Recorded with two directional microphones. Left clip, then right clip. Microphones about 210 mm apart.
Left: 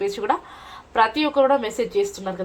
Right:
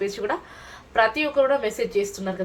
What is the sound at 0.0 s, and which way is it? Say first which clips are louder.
Speech: left 4 dB; 35° left (ahead or behind).